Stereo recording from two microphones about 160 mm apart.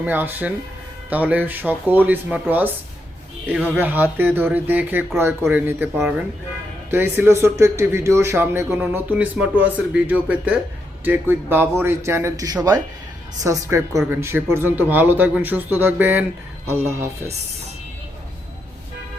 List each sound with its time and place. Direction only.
0.0 s a man's voice: 10° right (ahead or behind)
3.8 s a man's voice: 10° right (ahead or behind)
6.9 s a man's voice: 15° right (ahead or behind)